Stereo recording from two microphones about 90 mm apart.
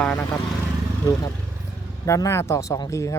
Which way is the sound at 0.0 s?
15° left (ahead or behind).